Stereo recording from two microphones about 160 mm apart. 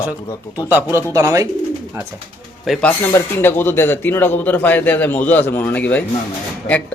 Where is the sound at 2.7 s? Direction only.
Centre (ahead or behind).